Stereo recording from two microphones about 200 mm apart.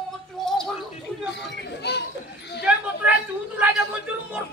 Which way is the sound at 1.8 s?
55° left (ahead or behind).